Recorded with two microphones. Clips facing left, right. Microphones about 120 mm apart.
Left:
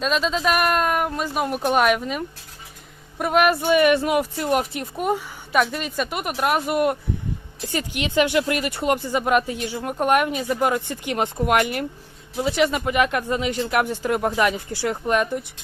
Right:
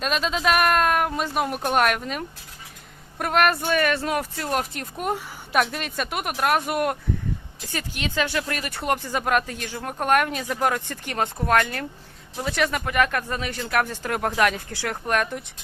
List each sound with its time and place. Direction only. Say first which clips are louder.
0.0 s speech: left 2 dB; centre (ahead or behind)
8.1 s speech: left 7 dB; 15° left (ahead or behind)
14.1 s speech: left 1 dB; 5° left (ahead or behind)